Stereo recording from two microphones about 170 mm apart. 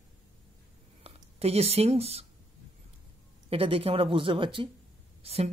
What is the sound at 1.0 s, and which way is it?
Speech, 35° right (ahead or behind).